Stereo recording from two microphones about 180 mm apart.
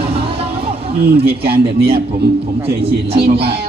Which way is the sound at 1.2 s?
60° right (ahead or behind).